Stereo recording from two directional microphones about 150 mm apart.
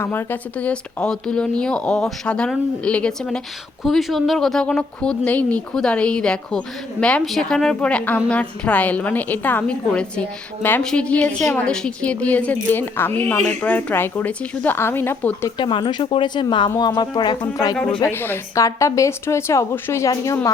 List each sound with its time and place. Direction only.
0.0 s a woman's voice: 15° left (ahead or behind)
15.5 s a woman's voice: 30° left (ahead or behind)
17.7 s speech: 5° left (ahead or behind)
18.0 s a woman's voice: 15° left (ahead or behind)